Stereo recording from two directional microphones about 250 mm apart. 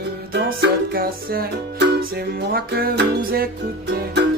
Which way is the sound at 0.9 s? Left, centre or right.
Right.